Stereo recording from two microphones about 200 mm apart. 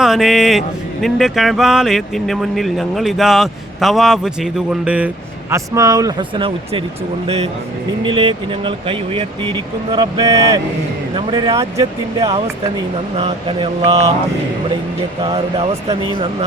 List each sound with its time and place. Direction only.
0.0 s a man's voice: centre (ahead or behind); by 6.8 s 25° right (ahead or behind)
8.0 s speech: 25° right (ahead or behind)
13.1 s speech: 30° right (ahead or behind)
15.2 s speech: 30° right (ahead or behind)